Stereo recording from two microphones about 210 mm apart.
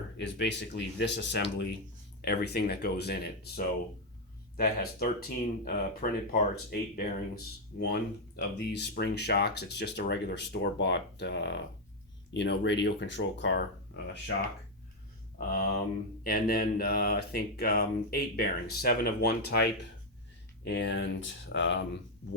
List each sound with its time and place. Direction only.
0.2 s speech: 55° left (ahead or behind)
15.4 s speech: 40° left (ahead or behind)
20.7 s speech: 55° left (ahead or behind)